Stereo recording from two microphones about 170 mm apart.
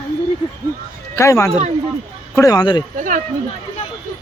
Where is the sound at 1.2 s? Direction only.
15° left (ahead or behind).